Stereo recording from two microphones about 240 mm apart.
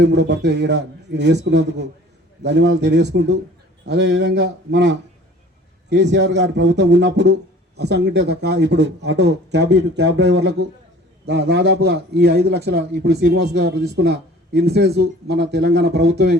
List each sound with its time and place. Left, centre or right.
0.0 s a man's voice: right